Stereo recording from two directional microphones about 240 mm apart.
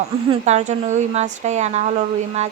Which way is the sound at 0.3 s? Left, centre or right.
Right.